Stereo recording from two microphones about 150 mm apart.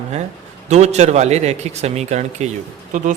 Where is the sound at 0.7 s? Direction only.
50° right (ahead or behind).